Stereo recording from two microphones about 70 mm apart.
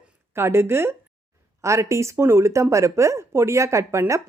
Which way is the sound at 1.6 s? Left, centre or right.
Right.